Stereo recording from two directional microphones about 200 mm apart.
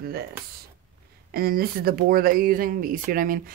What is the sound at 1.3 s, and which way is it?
Speech, 50° right (ahead or behind).